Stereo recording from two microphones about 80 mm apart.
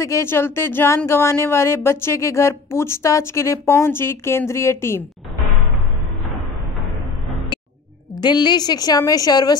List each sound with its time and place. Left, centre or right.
0.0 s speech: left
8.2 s a woman's voice: left